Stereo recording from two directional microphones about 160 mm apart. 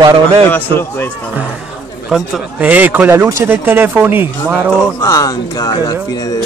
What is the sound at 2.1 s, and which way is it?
Speech, 5° right (ahead or behind).